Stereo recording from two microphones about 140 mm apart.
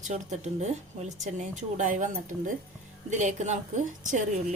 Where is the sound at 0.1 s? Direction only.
55° right (ahead or behind).